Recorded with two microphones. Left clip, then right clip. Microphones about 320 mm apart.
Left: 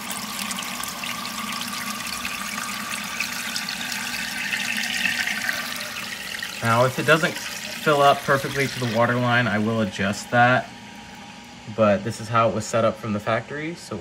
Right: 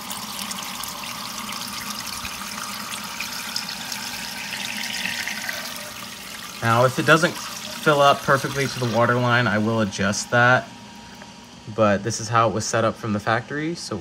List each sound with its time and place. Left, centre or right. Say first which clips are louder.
6.6 s speech: right 2 dB; centre
8.7 s speech: right 1 dB; centre
9.0 s speech: right 1 dB; centre
11.8 s speech: even; centre